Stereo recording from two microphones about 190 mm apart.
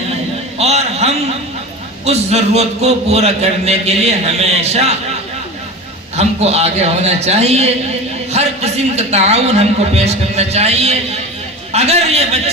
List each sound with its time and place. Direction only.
0.6 s a sound: 35° right (ahead or behind)
2.0 s a man's voice: 35° right (ahead or behind)
6.1 s a man's voice: 35° right (ahead or behind)